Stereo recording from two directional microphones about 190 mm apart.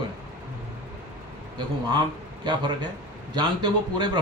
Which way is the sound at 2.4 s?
25° right (ahead or behind).